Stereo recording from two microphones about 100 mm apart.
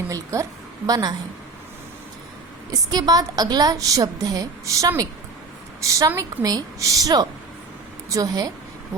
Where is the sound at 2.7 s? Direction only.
40° right (ahead or behind).